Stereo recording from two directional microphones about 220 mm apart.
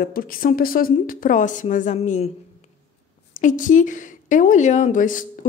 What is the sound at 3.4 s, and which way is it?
Speech, 35° left (ahead or behind).